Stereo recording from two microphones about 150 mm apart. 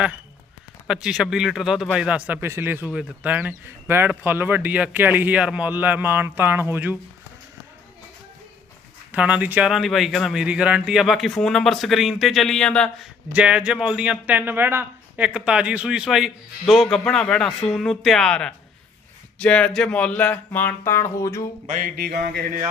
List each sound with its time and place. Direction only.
0.9 s speech: 5° right (ahead or behind)
9.1 s speech: 10° right (ahead or behind)
13.3 s speech: 5° right (ahead or behind); by 21.4 s 20° left (ahead or behind)
21.7 s a sound: 65° right (ahead or behind); by 22.5 s 90° right